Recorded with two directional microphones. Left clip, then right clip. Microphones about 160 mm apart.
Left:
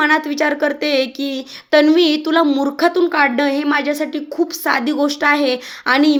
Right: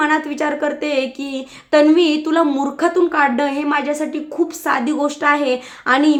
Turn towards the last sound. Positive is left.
turn(degrees=30)  # may be behind; listen again after turning